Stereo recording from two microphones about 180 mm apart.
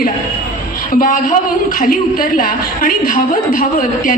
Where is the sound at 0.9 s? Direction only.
50° left (ahead or behind).